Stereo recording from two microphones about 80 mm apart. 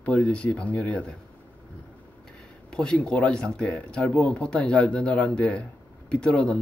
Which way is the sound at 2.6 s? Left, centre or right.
Centre.